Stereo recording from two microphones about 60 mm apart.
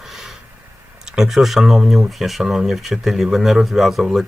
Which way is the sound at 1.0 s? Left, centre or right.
Centre.